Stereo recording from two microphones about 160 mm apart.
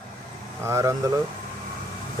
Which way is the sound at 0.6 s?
20° right (ahead or behind).